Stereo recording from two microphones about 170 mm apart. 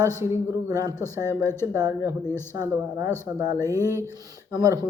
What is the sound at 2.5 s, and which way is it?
Speech, 15° right (ahead or behind).